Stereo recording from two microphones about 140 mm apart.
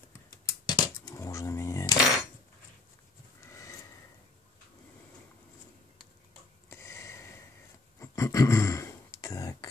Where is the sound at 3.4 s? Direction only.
20° left (ahead or behind).